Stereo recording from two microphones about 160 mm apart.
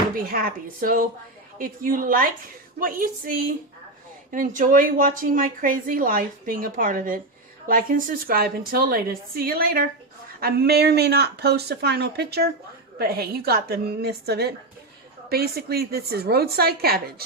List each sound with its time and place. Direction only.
0.3 s a woman's voice: 65° right (ahead or behind)
10.4 s speech: 85° right
13.0 s a woman's voice: 75° right (ahead or behind)